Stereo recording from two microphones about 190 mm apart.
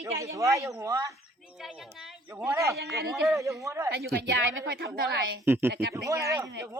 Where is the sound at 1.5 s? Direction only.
Centre (ahead or behind).